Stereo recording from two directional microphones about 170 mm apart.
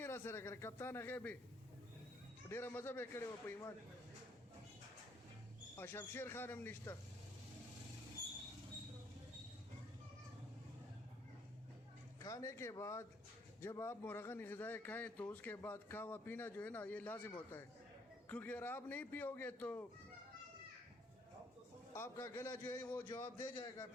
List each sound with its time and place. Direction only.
0.0 s a man's voice: 15° left (ahead or behind)
2.5 s a man's voice: 15° left (ahead or behind)
5.7 s a man's voice: 15° left (ahead or behind)
12.2 s a man's voice: 20° left (ahead or behind)
21.9 s a man's voice: 15° left (ahead or behind)